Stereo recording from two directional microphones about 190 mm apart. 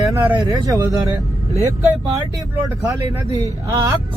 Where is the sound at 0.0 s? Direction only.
15° right (ahead or behind).